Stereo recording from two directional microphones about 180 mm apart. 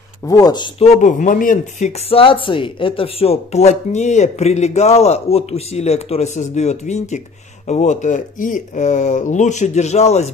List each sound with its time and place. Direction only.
0.3 s speech: 20° left (ahead or behind); by 10.3 s 40° left (ahead or behind)